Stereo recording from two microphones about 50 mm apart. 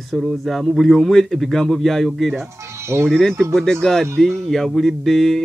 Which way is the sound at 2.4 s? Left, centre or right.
Right.